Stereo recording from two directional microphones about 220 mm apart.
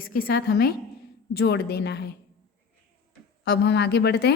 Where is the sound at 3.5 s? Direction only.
50° left (ahead or behind).